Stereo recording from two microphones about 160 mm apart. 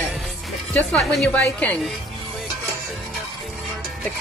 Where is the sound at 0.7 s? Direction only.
Centre (ahead or behind).